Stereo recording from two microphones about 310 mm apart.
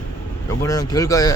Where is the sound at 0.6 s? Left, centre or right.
Centre.